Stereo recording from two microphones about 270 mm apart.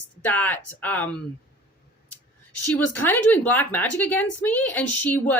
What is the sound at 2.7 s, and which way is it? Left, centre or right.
A woman's voice, centre.